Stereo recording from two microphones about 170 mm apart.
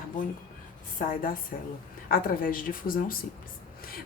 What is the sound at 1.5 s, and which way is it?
A woman's voice, 50° left (ahead or behind).